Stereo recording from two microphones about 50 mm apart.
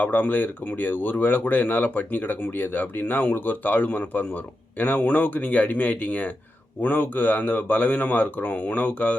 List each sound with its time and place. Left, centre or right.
0.0 s speech: left